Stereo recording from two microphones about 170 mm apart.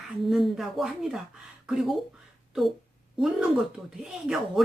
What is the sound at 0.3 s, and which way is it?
Speech, centre (ahead or behind).